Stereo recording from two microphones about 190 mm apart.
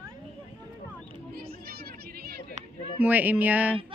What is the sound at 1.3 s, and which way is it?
Chatter, 55° right (ahead or behind).